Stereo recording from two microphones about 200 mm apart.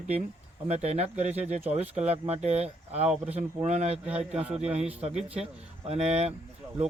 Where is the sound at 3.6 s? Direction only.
35° right (ahead or behind).